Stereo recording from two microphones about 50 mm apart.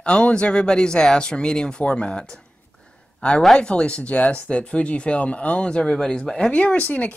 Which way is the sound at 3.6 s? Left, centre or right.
Centre.